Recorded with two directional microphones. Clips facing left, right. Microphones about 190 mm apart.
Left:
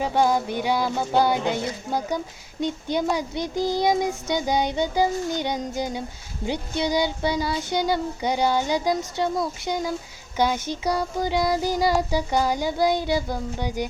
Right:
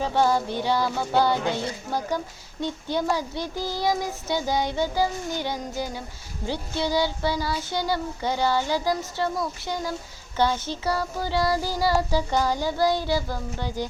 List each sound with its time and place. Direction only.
0.0 s speech: 15° left (ahead or behind)